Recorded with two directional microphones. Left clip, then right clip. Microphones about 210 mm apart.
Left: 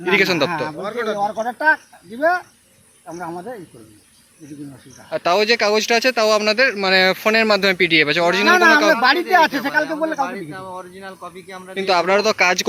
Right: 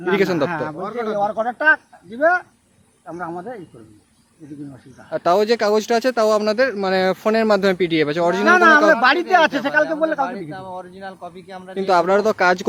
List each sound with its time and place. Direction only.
0.0 s a man's voice: 15° right (ahead or behind)
0.8 s speech: 55° right (ahead or behind)
1.1 s speech: centre (ahead or behind)
3.1 s speech: centre (ahead or behind)
5.1 s speech: 20° right (ahead or behind)
8.4 s speech: centre (ahead or behind)
9.0 s a man's voice: 15° right (ahead or behind)
9.7 s speech: centre (ahead or behind)
10.2 s a man's voice: 55° right (ahead or behind)
11.7 s speech: 20° right (ahead or behind)